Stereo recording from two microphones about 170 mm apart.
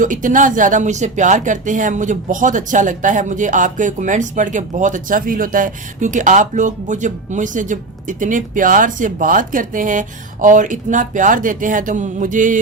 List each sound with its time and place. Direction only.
0.0 s speech: 50° right (ahead or behind)